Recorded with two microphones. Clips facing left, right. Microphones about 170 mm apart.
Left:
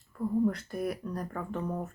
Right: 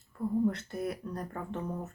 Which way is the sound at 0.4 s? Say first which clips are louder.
Left 1 dB; 25° right (ahead or behind).